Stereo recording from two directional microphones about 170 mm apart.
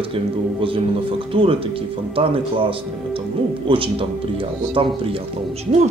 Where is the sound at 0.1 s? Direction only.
30° right (ahead or behind).